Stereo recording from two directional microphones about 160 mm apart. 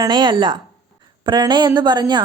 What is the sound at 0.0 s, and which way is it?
Speech, 25° right (ahead or behind).